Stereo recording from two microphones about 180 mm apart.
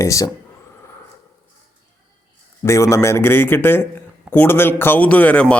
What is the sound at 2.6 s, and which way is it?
A man's voice, 15° left (ahead or behind).